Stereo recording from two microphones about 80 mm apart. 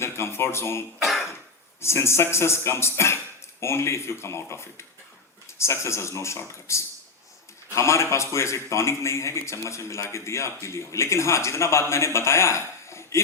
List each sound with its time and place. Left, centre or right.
0.0 s a man's voice: left